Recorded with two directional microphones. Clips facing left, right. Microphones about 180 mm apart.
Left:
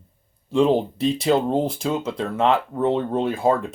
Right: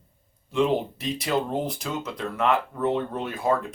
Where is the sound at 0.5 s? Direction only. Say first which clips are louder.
Left 5 dB; 30° left (ahead or behind).